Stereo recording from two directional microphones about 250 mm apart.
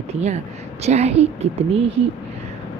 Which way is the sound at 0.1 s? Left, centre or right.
Right.